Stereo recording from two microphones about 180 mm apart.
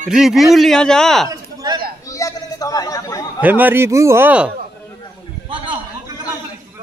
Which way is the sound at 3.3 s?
10° right (ahead or behind).